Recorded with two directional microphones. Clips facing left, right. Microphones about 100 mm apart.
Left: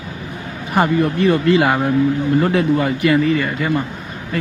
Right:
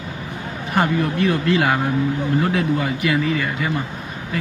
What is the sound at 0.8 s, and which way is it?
A man's voice, centre (ahead or behind).